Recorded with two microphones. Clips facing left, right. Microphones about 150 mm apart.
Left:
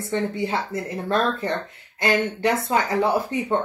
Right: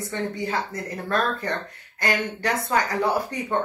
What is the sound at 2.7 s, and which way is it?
Speech, 25° left (ahead or behind).